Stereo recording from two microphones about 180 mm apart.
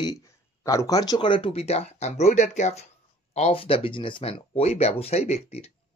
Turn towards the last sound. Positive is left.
turn(degrees=35)  # may be behind; listen again after turning